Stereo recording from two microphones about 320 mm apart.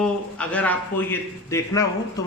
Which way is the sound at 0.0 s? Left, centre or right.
Centre.